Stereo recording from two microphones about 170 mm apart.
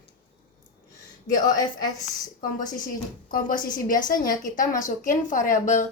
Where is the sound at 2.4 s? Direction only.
50° left (ahead or behind).